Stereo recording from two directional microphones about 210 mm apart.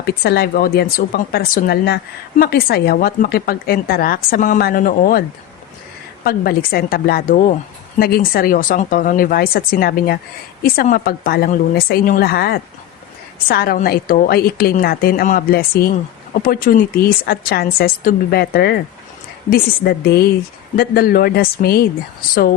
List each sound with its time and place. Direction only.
0.0 s speech: 50° left (ahead or behind)
6.2 s speech: 45° left (ahead or behind)